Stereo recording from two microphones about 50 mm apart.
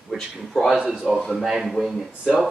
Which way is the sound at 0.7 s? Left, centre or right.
Centre.